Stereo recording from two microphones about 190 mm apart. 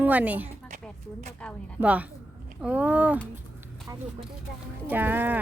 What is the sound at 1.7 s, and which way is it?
A woman's voice, 10° right (ahead or behind).